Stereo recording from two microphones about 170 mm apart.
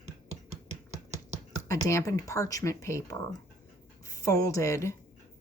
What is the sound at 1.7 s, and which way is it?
Speech, 20° left (ahead or behind).